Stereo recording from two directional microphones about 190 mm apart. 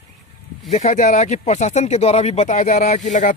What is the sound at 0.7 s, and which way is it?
Speech, 35° left (ahead or behind).